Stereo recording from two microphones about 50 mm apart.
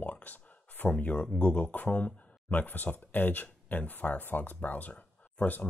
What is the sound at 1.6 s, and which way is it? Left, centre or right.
Speech, left.